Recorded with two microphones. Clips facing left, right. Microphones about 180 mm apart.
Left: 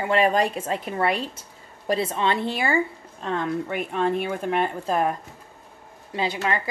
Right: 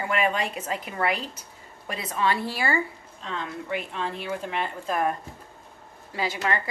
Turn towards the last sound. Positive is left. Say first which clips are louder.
# left 2 dB
turn(degrees=20)  # may be behind; listen again after turning